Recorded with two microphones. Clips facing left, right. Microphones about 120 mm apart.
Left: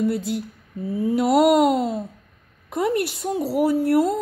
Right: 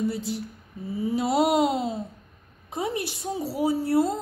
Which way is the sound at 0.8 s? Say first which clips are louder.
Left 5 dB; 60° left (ahead or behind).